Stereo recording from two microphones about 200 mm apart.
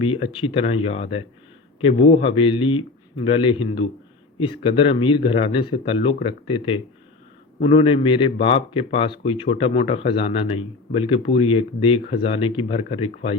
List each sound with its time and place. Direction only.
0.0 s a man's voice: 25° left (ahead or behind)